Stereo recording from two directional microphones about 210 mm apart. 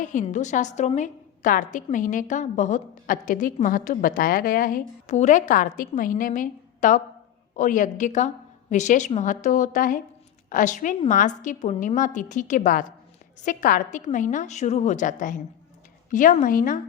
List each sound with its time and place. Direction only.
0.0 s a woman's voice: 35° left (ahead or behind)